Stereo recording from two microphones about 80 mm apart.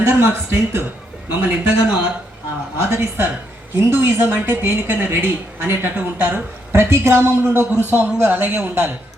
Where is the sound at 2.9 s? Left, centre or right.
Right.